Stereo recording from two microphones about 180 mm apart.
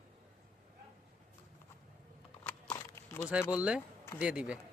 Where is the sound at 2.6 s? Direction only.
20° left (ahead or behind).